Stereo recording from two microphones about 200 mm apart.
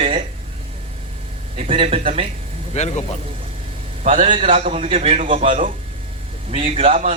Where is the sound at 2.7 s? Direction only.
35° left (ahead or behind).